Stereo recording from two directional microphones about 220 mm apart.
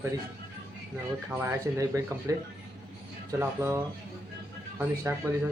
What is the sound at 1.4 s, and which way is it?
Speech, 15° right (ahead or behind).